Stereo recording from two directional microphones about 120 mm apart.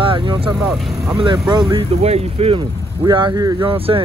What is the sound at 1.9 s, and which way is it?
Speech, 60° right (ahead or behind).